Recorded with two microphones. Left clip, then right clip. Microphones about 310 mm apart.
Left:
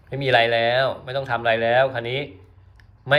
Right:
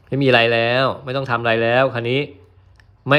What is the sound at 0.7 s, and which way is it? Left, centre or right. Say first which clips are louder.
Speech: right 2 dB; right.